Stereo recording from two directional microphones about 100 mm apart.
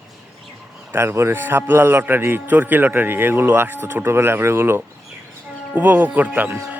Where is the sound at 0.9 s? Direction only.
25° right (ahead or behind).